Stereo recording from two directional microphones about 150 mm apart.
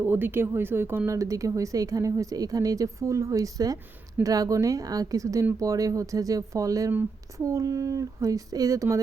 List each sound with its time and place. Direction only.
0.0 s speech: 15° right (ahead or behind)